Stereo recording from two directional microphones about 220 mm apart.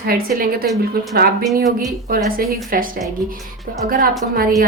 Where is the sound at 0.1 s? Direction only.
40° right (ahead or behind).